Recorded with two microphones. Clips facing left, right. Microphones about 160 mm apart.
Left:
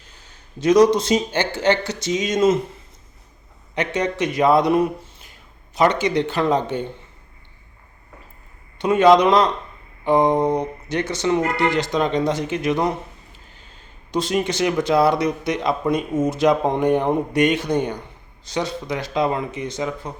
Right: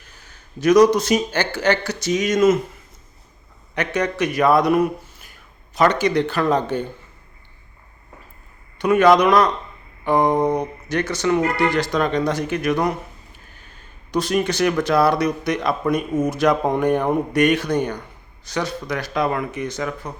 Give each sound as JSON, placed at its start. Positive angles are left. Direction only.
{"t": 0.3, "sound": "speech", "side_deg": 25}
{"t": 3.8, "sound": "speech", "side_deg": 20}
{"t": 8.8, "sound": "speech", "side_deg": 25}
{"t": 14.1, "sound": "speech", "side_deg": 25}